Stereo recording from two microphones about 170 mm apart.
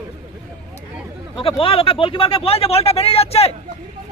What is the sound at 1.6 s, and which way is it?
Speech, 30° left (ahead or behind).